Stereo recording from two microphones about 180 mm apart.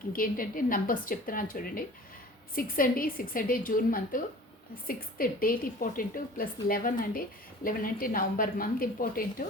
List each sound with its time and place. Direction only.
0.2 s a woman's voice: 50° left (ahead or behind)